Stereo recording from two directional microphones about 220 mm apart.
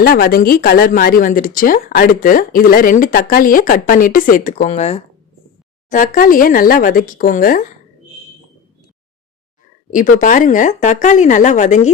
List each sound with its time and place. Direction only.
0.0 s speech: 40° left (ahead or behind)
9.9 s speech: 35° left (ahead or behind)